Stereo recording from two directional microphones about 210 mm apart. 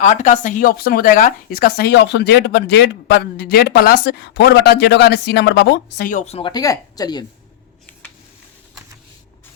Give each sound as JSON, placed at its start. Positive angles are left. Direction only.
{"t": 0.0, "sound": "speech", "side_deg": 35}
{"t": 6.1, "sound": "speech", "side_deg": 35}